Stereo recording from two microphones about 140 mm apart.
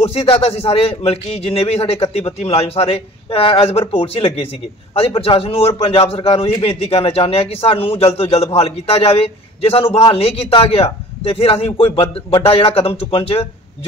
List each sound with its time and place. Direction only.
0.0 s a man's voice: 45° left (ahead or behind)